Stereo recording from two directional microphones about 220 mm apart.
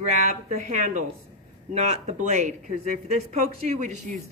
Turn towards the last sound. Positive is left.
turn(degrees=-30)  # may be behind; listen again after turning